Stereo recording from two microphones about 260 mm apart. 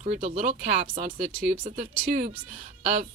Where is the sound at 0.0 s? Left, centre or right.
Right.